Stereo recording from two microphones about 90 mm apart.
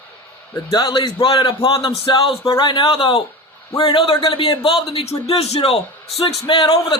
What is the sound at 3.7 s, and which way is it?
A man's voice, 75° left (ahead or behind).